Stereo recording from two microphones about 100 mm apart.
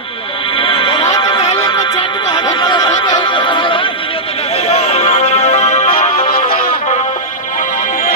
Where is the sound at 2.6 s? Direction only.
45° left (ahead or behind).